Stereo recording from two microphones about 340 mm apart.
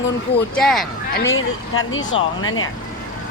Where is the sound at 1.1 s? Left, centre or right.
Left.